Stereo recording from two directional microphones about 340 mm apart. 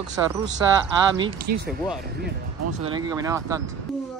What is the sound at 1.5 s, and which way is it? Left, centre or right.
Speech, right.